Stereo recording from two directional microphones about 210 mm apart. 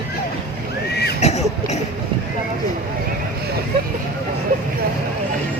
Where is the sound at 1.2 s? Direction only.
30° left (ahead or behind).